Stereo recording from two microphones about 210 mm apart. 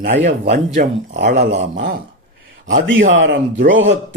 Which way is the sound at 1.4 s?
55° right (ahead or behind).